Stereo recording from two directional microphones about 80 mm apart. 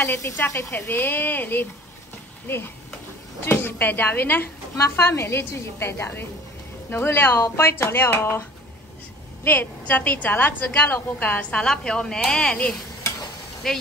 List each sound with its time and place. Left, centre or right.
0.0 s a woman's voice: left
0.7 s a woman's voice: left
11.6 s a woman's voice: centre